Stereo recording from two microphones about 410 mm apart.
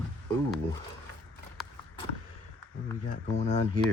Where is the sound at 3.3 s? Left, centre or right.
Centre.